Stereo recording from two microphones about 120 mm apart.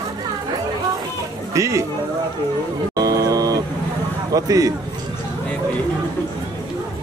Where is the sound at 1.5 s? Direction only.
25° right (ahead or behind).